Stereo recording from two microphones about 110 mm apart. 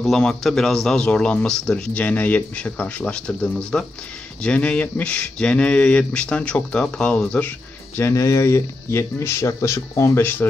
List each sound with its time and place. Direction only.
0.0 s speech: 5° left (ahead or behind)
8.0 s speech: 30° left (ahead or behind)